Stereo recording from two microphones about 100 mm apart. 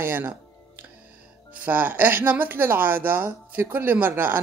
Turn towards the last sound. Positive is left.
turn(degrees=-20)  # may be behind; listen again after turning